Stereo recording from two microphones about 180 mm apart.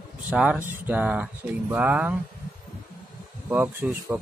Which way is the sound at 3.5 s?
10° right (ahead or behind).